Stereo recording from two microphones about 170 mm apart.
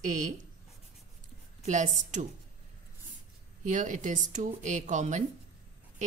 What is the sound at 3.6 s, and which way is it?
A woman's voice, 45° right (ahead or behind).